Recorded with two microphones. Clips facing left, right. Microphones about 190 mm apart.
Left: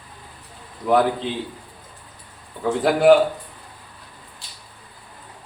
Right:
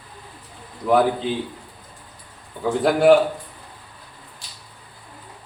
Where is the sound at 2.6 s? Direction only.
Centre (ahead or behind).